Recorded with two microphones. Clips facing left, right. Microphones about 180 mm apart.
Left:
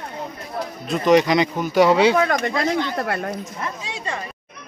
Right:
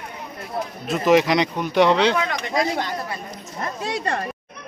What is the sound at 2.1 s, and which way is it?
Speech, 45° left (ahead or behind).